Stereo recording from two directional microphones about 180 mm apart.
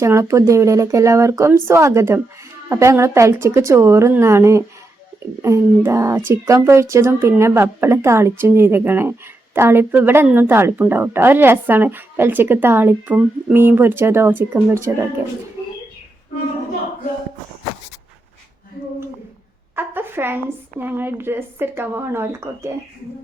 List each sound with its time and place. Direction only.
0.0 s a woman's voice: 15° right (ahead or behind)
19.7 s a woman's voice: 10° right (ahead or behind)